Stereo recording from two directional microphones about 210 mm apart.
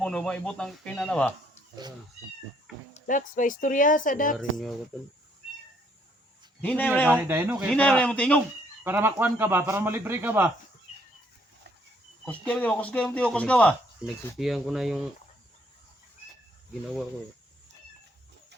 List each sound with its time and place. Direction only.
0.0 s speech: 5° left (ahead or behind)
2.9 s speech: 40° left (ahead or behind)
4.4 s speech: centre (ahead or behind)
6.6 s speech: 5° left (ahead or behind)
7.1 s speech: 10° right (ahead or behind)
7.7 s speech: 5° left (ahead or behind)
8.8 s speech: 10° right (ahead or behind)
12.2 s speech: 5° left (ahead or behind)